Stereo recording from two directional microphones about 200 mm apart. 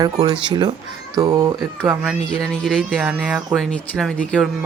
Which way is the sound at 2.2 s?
5° left (ahead or behind).